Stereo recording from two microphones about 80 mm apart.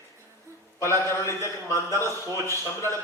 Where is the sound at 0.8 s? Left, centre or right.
Left.